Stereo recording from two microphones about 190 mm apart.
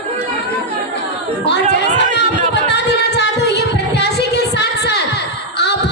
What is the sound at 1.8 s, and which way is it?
Chatter, 65° left (ahead or behind).